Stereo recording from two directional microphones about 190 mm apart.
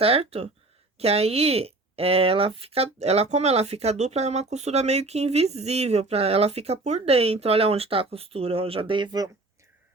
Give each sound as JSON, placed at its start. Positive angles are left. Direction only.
{"t": 0.0, "sound": "speech", "side_deg": -30}